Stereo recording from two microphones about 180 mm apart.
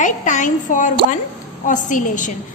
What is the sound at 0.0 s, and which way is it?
A woman's voice, 45° left (ahead or behind).